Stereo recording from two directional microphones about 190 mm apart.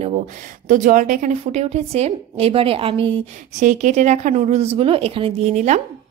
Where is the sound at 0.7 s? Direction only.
45° right (ahead or behind); by 3.6 s 30° right (ahead or behind).